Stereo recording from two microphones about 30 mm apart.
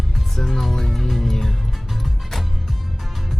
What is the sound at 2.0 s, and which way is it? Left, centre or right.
Music, centre.